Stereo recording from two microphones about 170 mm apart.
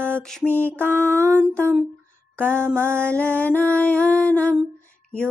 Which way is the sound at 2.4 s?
5° left (ahead or behind).